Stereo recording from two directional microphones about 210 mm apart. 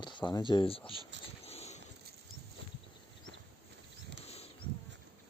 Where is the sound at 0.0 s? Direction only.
20° left (ahead or behind).